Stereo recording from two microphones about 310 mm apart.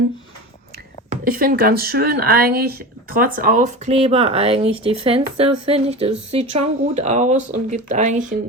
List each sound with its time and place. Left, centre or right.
1.1 s speech: right